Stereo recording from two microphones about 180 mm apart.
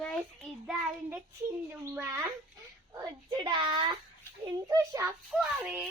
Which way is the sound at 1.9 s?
15° right (ahead or behind).